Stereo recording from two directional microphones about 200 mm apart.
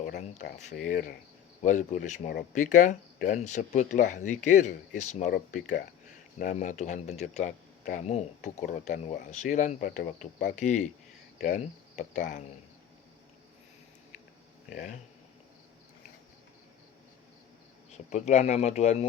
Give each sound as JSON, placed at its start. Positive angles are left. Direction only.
{"t": 0.9, "sound": "speech", "side_deg": 40}
{"t": 6.4, "sound": "speech", "side_deg": 40}
{"t": 14.7, "sound": "speech", "side_deg": 40}
{"t": 17.9, "sound": "speech", "side_deg": 35}